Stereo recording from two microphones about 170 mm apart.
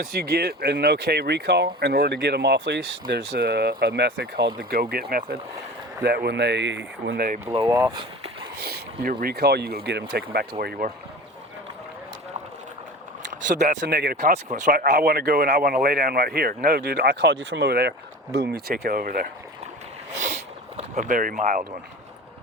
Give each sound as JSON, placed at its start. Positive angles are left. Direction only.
{"t": 0.0, "sound": "speech", "side_deg": -65}
{"t": 4.5, "sound": "speech", "side_deg": -60}
{"t": 6.0, "sound": "speech", "side_deg": -75}
{"t": 7.5, "sound": "speech", "side_deg": -15}
{"t": 7.9, "sound": "a sound", "side_deg": -30}
{"t": 8.6, "sound": "speech", "side_deg": -65}
{"t": 13.5, "sound": "speech", "side_deg": -45}
{"t": 13.8, "sound": "speech", "side_deg": -70}
{"t": 14.3, "sound": "speech", "side_deg": -45}
{"t": 14.8, "sound": "speech", "side_deg": -70}
{"t": 20.9, "sound": "speech", "side_deg": -50}